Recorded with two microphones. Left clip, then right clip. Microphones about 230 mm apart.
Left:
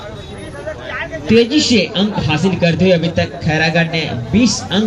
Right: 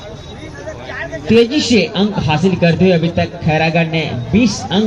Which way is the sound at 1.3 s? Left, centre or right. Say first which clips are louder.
Even; right.